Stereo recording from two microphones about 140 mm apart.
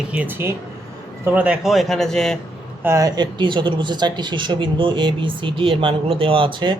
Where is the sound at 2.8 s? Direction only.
20° right (ahead or behind).